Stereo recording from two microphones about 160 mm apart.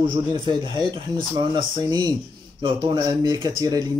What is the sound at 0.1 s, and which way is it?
Speech, 30° right (ahead or behind).